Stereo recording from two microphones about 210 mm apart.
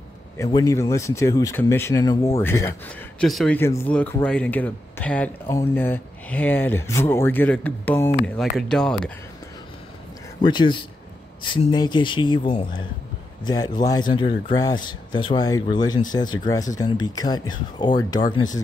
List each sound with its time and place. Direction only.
0.4 s speech: 20° left (ahead or behind)
3.2 s speech: centre (ahead or behind)
10.4 s speech: 20° left (ahead or behind)